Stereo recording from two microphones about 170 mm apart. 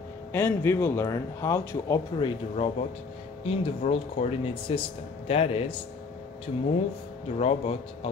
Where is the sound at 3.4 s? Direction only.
35° left (ahead or behind).